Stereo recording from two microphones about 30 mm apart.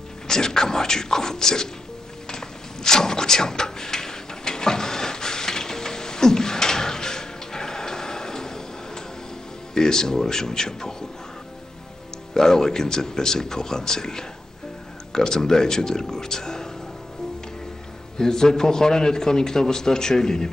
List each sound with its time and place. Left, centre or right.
0.3 s a man's voice: centre
2.2 s a sound: left
9.8 s a man's voice: left
12.4 s a man's voice: centre
18.1 s a man's voice: centre